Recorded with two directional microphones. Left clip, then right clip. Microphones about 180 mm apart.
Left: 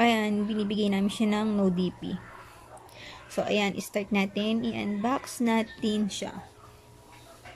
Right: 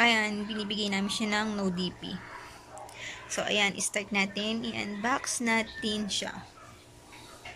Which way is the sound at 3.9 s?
20° left (ahead or behind).